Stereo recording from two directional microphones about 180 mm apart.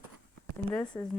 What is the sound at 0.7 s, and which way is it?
Speech, 10° left (ahead or behind).